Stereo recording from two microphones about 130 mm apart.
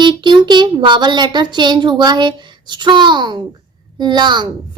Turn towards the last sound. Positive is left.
turn(degrees=-35)  # may be behind; listen again after turning